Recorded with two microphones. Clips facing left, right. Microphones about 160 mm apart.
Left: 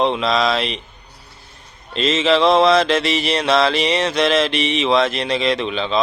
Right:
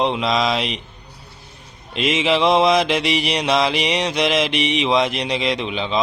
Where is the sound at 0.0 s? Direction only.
15° right (ahead or behind).